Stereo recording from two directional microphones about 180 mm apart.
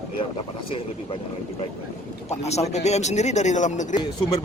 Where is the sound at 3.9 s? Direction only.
20° left (ahead or behind).